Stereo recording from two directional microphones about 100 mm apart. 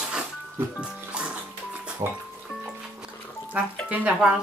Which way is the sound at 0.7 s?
10° right (ahead or behind).